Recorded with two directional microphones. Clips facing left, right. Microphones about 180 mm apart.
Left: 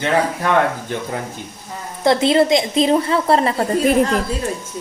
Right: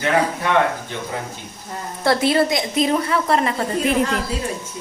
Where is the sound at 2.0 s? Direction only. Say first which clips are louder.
Left 3 dB; 25° left (ahead or behind).